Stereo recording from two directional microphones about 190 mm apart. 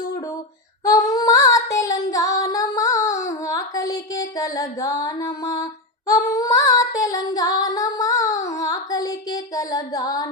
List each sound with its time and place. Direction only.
0.9 s female singing: 20° left (ahead or behind)
6.1 s child singing: 15° left (ahead or behind)